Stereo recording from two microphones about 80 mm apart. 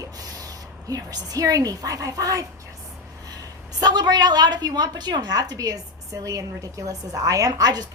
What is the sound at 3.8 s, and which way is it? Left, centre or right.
A woman's voice, right.